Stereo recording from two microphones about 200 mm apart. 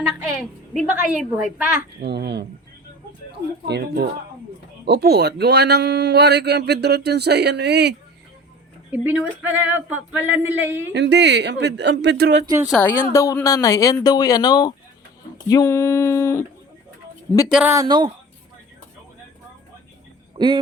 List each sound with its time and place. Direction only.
0.1 s a woman's voice: 5° right (ahead or behind)
2.0 s a man's voice: 55° right (ahead or behind)
3.7 s a man's voice: 55° right (ahead or behind)
8.9 s a sound: 10° right (ahead or behind)
10.9 s a man's voice: 60° right (ahead or behind)
12.7 s speech: 10° left (ahead or behind)
17.5 s a sound: 10° right (ahead or behind)
20.4 s a man's voice: 20° right (ahead or behind)